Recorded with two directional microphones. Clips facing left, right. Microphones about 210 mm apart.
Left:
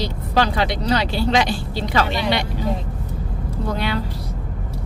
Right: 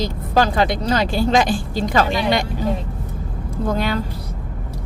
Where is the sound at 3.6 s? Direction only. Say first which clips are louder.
Right 3 dB; 45° right (ahead or behind).